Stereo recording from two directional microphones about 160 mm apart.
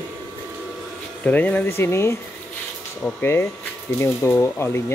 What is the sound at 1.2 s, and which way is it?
Speech, 10° left (ahead or behind).